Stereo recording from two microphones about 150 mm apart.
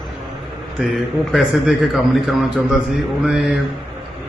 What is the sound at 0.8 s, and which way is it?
Speech, centre (ahead or behind).